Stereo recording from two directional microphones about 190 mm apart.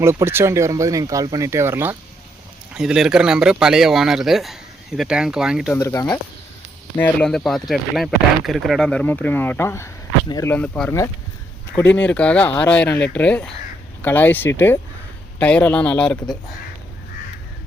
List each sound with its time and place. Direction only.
0.0 s speech: 15° right (ahead or behind)
5.7 s speech: 15° left (ahead or behind)
6.9 s speech: 5° left (ahead or behind)